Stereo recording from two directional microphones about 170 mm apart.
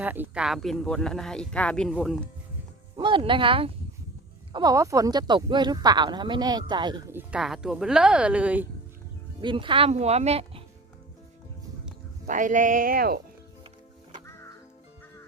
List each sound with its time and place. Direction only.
0.0 s speech: 10° right (ahead or behind)
3.0 s speech: 30° right (ahead or behind)
7.1 s speech: 10° right (ahead or behind)
9.4 s speech: 30° right (ahead or behind)
12.3 s speech: 50° right (ahead or behind)